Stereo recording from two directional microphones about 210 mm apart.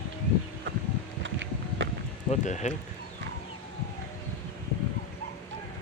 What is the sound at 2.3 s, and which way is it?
Speech, 35° left (ahead or behind).